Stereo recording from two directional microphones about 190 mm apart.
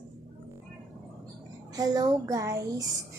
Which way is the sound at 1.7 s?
20° right (ahead or behind).